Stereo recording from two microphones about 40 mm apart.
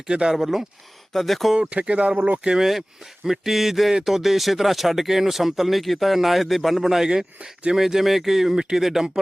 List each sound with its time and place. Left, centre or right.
0.1 s speech: centre
1.1 s speech: centre
1.5 s speech: right
2.4 s speech: right
3.3 s speech: centre